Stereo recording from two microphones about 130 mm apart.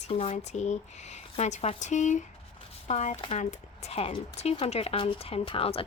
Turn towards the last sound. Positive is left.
turn(degrees=45)  # may be behind; listen again after turning